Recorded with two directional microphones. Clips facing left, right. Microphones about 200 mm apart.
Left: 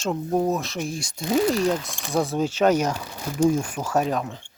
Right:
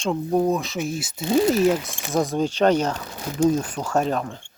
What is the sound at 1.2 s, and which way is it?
Speech, 25° right (ahead or behind).